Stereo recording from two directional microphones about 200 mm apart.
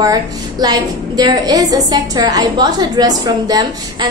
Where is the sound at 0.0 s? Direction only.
20° right (ahead or behind).